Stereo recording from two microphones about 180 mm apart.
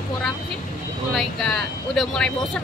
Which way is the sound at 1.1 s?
Centre (ahead or behind).